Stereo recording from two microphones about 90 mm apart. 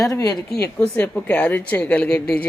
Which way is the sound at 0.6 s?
20° left (ahead or behind).